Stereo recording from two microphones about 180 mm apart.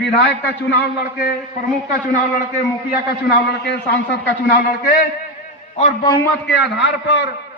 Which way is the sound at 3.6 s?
65° left (ahead or behind).